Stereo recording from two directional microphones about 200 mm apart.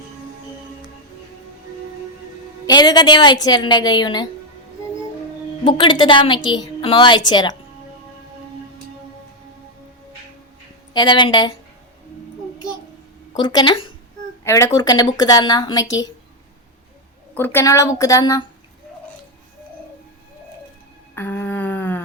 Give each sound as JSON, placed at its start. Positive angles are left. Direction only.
{"t": 2.6, "sound": "a woman's voice", "side_deg": 20}
{"t": 5.6, "sound": "a woman's voice", "side_deg": 25}
{"t": 10.9, "sound": "a woman's voice", "side_deg": 25}
{"t": 13.3, "sound": "a woman's voice", "side_deg": 20}
{"t": 17.3, "sound": "a woman's voice", "side_deg": 10}
{"t": 21.2, "sound": "a sound", "side_deg": 10}